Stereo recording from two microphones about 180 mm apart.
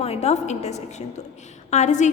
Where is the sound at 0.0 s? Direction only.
35° left (ahead or behind).